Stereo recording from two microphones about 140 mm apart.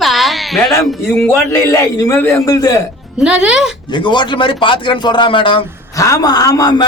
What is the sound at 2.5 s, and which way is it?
Speech, 25° left (ahead or behind).